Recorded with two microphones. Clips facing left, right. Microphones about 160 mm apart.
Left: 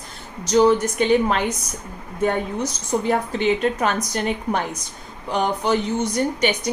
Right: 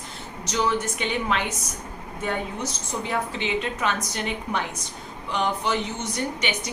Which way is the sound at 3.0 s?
45° left (ahead or behind).